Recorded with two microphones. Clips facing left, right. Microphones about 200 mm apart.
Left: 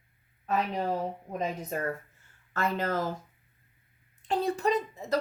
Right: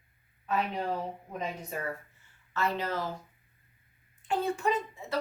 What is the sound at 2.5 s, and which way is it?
Speech, 50° left (ahead or behind).